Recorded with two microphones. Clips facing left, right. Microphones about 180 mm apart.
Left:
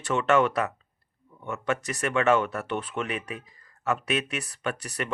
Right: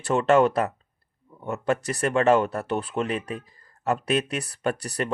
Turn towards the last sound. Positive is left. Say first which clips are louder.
# right 5 dB
turn(degrees=-35)  # may be behind; listen again after turning